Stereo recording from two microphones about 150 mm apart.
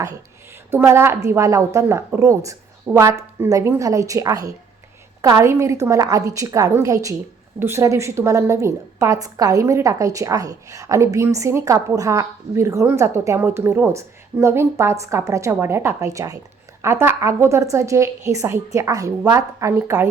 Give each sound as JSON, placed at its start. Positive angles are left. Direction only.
{"t": 0.7, "sound": "a woman's voice", "side_deg": -15}